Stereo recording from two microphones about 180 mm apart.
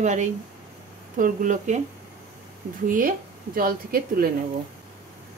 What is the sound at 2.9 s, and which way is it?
A woman's voice, 50° right (ahead or behind).